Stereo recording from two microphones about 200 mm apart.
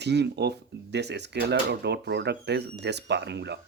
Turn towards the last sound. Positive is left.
turn(degrees=-60)  # may be behind; listen again after turning